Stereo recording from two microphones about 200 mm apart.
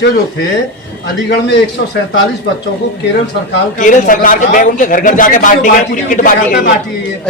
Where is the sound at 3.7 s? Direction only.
40° left (ahead or behind).